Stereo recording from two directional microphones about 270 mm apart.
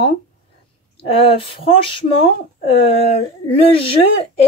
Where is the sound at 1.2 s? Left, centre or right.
Centre.